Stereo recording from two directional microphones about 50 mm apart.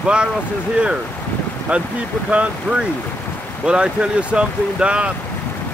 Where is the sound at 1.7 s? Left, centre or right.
Right.